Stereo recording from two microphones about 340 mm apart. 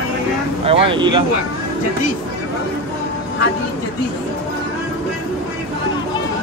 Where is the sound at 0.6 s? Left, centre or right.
Centre.